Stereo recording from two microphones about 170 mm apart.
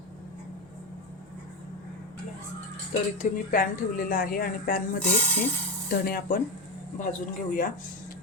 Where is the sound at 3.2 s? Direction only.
55° left (ahead or behind).